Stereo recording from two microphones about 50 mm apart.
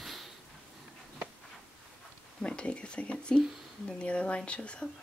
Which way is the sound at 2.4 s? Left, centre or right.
Left.